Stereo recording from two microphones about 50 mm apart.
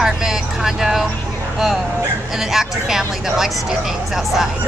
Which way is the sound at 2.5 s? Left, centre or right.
Centre.